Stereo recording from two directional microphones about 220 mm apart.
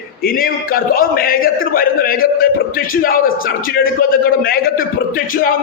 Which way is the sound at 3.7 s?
40° left (ahead or behind).